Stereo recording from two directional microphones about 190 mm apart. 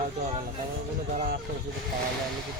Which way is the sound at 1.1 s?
50° right (ahead or behind).